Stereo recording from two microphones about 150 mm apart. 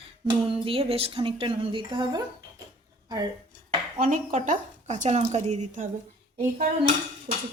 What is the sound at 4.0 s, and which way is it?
Speech, 65° right (ahead or behind).